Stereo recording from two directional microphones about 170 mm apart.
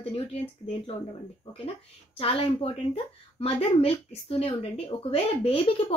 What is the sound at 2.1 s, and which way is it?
Speech, 35° left (ahead or behind).